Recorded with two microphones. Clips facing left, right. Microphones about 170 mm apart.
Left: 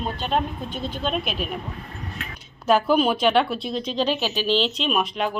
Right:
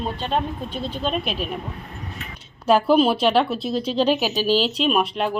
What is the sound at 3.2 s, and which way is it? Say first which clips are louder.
Dishes: right 1 dB; centre (ahead or behind).